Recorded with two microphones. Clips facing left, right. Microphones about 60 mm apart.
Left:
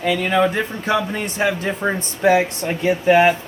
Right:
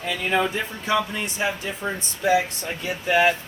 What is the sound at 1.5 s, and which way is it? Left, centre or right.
Speech, left.